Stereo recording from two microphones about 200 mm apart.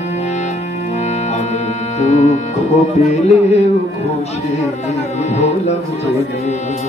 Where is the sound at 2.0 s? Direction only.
35° left (ahead or behind).